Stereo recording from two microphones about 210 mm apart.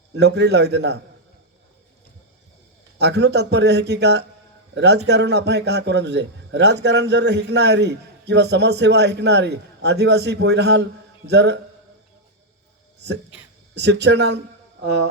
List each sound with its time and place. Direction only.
0.2 s a man's voice: 55° right (ahead or behind)
3.0 s a man's voice: 55° right (ahead or behind)
13.7 s speech: 55° right (ahead or behind)